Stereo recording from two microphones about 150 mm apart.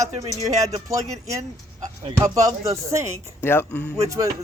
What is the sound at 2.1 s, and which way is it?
Speech, 20° right (ahead or behind).